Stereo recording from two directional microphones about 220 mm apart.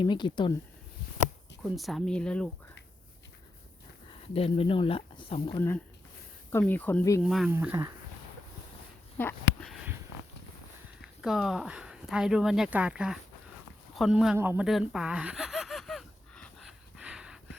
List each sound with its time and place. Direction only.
0.0 s speech: 20° left (ahead or behind)
1.7 s speech: centre (ahead or behind)
4.4 s speech: 25° left (ahead or behind)
5.5 s speech: 10° left (ahead or behind)
7.2 s speech: centre (ahead or behind)
9.1 s a sound: 5° left (ahead or behind)
11.2 s speech: centre (ahead or behind)
14.3 s a sound: 10° right (ahead or behind)